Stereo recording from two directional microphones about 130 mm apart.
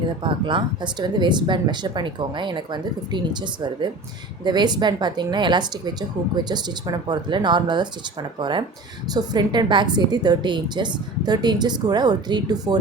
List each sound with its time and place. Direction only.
0.2 s speech: 40° right (ahead or behind)